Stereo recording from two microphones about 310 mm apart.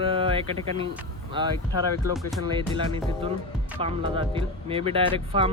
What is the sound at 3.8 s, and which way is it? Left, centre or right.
Speech, centre.